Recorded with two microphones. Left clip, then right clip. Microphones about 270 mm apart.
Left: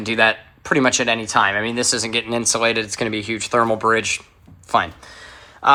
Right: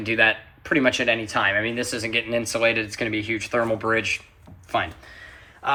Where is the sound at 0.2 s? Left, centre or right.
Centre.